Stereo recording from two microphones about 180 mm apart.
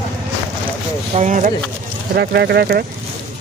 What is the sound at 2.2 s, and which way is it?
Speech, 70° right (ahead or behind).